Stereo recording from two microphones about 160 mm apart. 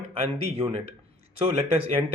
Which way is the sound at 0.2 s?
40° right (ahead or behind).